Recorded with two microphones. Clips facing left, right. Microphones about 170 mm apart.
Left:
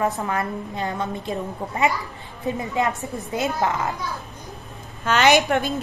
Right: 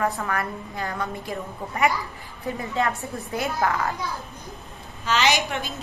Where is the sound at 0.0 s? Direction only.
20° left (ahead or behind).